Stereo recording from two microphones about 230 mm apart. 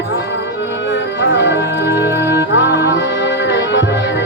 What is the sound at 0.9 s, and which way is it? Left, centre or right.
Music, left.